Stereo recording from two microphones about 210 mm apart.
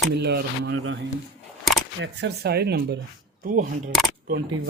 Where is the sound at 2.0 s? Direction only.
50° right (ahead or behind).